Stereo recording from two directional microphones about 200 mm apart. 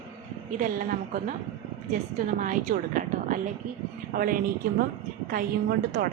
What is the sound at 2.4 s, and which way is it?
Speech, 40° right (ahead or behind).